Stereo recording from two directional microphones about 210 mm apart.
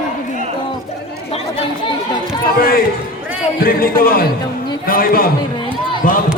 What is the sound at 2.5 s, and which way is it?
Speech, 45° left (ahead or behind).